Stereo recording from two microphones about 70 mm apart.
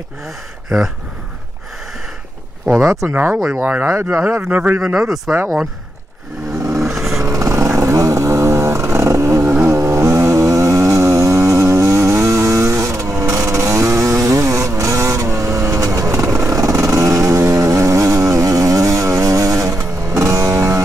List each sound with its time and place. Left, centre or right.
0.7 s speech: centre
3.1 s speech: right
4.9 s speech: centre
5.3 s speech: right
6.8 s vehicle: centre
7.1 s motorcycle: right
17.4 s chainsaw: right